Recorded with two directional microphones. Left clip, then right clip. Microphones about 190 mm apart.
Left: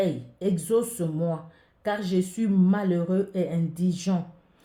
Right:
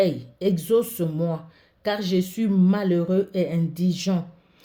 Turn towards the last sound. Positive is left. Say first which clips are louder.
# right 3 dB
turn(degrees=-35)  # may be behind; listen again after turning